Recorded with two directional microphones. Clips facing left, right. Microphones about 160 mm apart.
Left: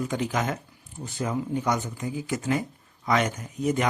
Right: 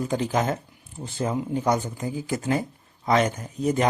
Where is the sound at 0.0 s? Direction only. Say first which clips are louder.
Right 3 dB; 30° right (ahead or behind).